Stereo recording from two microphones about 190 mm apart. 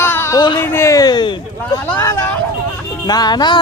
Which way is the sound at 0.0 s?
10° left (ahead or behind).